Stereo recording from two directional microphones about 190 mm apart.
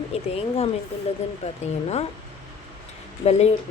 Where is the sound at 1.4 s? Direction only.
35° left (ahead or behind).